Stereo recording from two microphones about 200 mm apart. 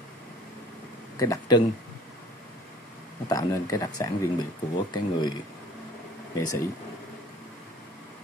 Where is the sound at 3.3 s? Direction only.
15° left (ahead or behind).